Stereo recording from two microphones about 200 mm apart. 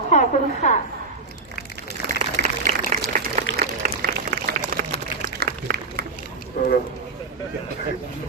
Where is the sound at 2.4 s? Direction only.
40° right (ahead or behind).